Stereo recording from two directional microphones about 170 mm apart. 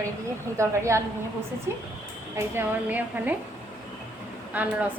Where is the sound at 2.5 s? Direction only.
10° right (ahead or behind).